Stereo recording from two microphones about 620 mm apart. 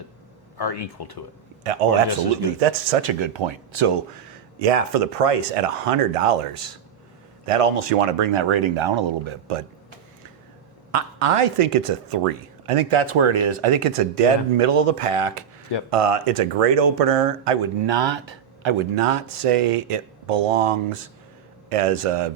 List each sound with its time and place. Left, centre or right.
0.6 s speech: left
2.6 s speech: right
3.2 s speech: right
4.6 s speech: right
7.4 s speech: right
10.9 s speech: right